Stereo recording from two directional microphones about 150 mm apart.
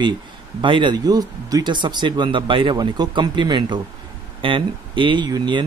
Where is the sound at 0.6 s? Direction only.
30° right (ahead or behind).